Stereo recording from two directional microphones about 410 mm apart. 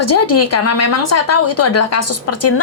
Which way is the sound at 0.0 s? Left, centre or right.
Left.